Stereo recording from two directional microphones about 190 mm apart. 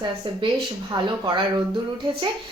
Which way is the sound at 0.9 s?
20° right (ahead or behind).